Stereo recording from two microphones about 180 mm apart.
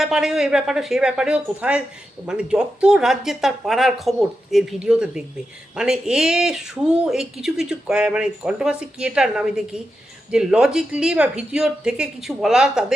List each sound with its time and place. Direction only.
0.0 s speech: 5° right (ahead or behind)